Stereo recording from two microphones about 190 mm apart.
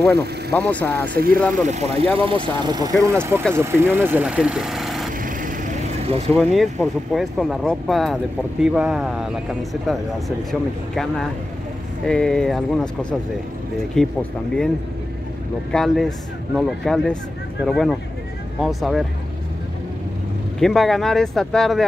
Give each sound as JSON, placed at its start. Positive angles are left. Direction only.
{"t": 0.5, "sound": "speech", "side_deg": 10}
{"t": 1.5, "sound": "speech", "side_deg": -35}
{"t": 5.2, "sound": "vehicle", "side_deg": -45}
{"t": 6.2, "sound": "speech", "side_deg": 0}
{"t": 14.0, "sound": "speech", "side_deg": 5}
{"t": 15.7, "sound": "speech", "side_deg": 0}
{"t": 20.5, "sound": "speech", "side_deg": 0}